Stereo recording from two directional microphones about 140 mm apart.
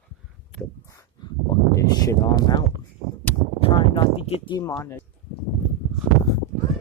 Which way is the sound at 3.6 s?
40° left (ahead or behind).